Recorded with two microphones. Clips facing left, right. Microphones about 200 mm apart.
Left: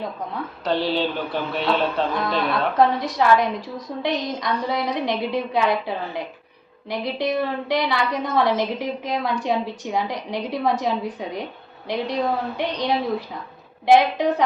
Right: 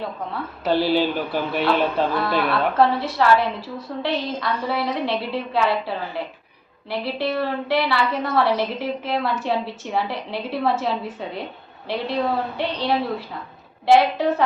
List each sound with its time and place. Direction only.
0.6 s speech: 5° right (ahead or behind)
2.5 s a woman's voice: 15° left (ahead or behind)